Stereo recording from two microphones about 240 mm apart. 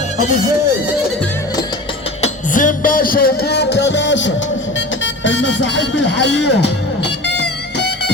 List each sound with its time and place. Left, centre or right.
2.2 s music: left
5.2 s speech: left
7.8 s music: left